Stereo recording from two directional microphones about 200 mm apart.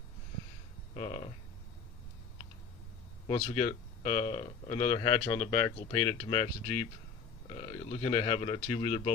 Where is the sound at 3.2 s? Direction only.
25° left (ahead or behind).